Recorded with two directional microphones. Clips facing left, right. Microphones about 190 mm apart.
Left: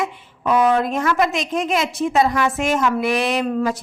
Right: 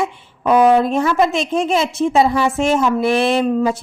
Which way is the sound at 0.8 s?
30° right (ahead or behind).